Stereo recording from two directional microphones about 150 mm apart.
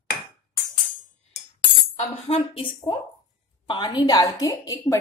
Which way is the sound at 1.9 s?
40° left (ahead or behind).